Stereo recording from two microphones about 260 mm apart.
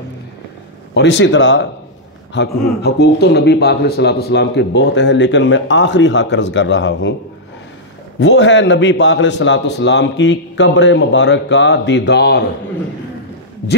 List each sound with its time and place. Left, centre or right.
0.9 s speech: left
8.2 s speech: left